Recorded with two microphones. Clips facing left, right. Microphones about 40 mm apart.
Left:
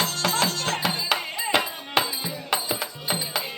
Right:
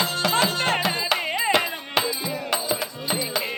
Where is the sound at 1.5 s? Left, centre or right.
Centre.